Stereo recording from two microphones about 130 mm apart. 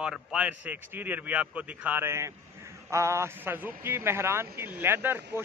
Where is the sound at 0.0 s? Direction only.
5° right (ahead or behind).